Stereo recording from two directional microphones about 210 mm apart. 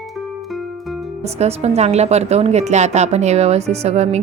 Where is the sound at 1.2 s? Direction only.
30° right (ahead or behind).